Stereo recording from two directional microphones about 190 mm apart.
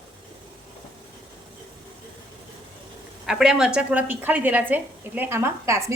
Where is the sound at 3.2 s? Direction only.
5° right (ahead or behind).